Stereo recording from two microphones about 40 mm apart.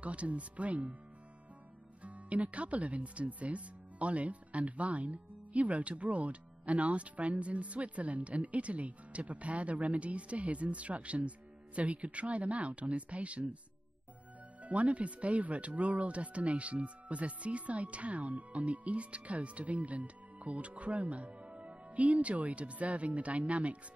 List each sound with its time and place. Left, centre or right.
0.0 s speech: right
2.0 s speech: right
14.6 s speech: right